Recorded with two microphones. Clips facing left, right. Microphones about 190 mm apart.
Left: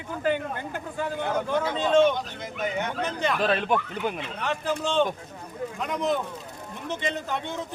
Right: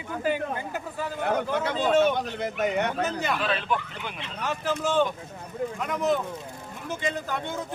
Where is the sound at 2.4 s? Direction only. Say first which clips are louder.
Right 4 dB; 65° right (ahead or behind).